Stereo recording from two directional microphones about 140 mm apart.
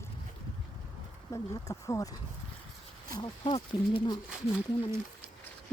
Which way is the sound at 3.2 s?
40° left (ahead or behind).